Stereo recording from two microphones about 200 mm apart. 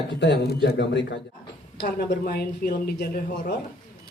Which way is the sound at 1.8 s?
50° left (ahead or behind).